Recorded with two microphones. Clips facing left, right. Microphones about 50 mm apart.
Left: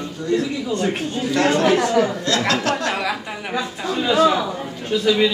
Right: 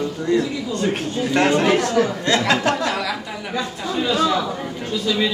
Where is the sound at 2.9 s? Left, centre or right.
Left.